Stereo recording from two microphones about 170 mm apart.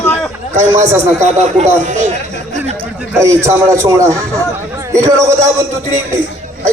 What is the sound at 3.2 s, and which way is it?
A man's voice, 15° right (ahead or behind).